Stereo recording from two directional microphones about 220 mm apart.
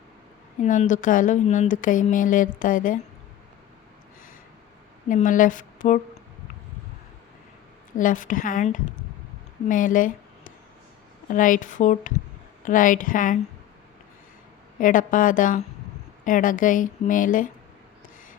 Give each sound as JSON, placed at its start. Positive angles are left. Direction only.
{"t": 0.6, "sound": "a woman's voice", "side_deg": 35}
{"t": 5.0, "sound": "speech", "side_deg": 35}
{"t": 7.9, "sound": "a woman's voice", "side_deg": 35}
{"t": 14.8, "sound": "a woman's voice", "side_deg": 35}